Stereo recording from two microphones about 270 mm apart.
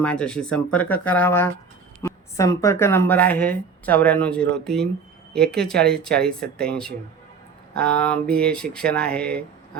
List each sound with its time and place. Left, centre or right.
0.0 s speech: centre